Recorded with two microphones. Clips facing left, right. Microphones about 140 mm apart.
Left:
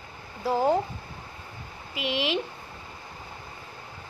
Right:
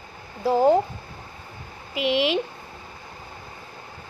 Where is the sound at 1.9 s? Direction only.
20° right (ahead or behind).